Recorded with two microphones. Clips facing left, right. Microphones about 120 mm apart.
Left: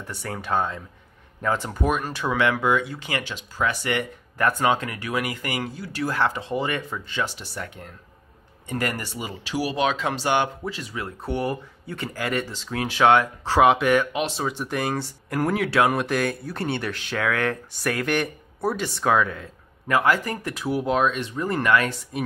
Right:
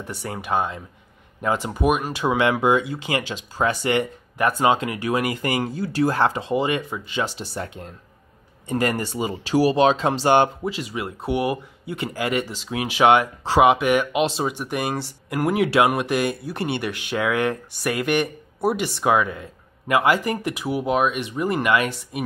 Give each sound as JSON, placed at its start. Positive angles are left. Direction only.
{"t": 0.1, "sound": "speech", "side_deg": -10}
{"t": 7.2, "sound": "speech", "side_deg": -30}
{"t": 9.5, "sound": "speech", "side_deg": -35}
{"t": 10.6, "sound": "speech", "side_deg": -15}
{"t": 15.5, "sound": "speech", "side_deg": -15}